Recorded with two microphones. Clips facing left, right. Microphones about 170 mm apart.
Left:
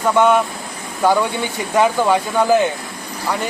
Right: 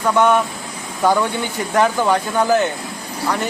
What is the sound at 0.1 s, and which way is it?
A man's voice, 15° left (ahead or behind).